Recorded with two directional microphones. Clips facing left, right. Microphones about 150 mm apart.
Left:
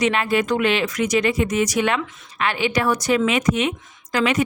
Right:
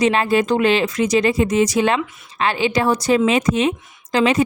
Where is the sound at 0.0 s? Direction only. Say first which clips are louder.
Right 3 dB; 30° right (ahead or behind).